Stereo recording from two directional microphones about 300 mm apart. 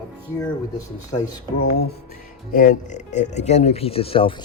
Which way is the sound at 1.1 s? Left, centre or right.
Left.